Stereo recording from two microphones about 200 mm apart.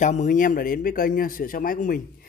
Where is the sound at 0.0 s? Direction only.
35° left (ahead or behind).